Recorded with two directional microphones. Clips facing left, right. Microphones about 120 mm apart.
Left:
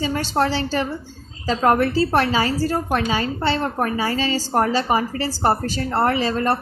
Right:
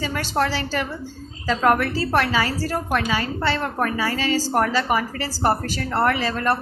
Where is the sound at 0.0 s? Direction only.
30° left (ahead or behind).